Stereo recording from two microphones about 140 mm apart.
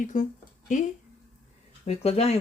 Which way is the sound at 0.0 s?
65° left (ahead or behind).